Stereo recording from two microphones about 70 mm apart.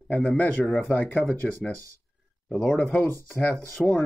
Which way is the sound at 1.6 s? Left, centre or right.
Centre.